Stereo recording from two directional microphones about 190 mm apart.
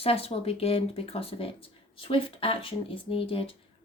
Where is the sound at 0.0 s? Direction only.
30° left (ahead or behind).